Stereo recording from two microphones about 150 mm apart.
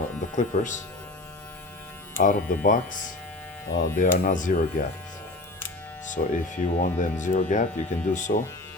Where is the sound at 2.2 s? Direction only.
65° left (ahead or behind).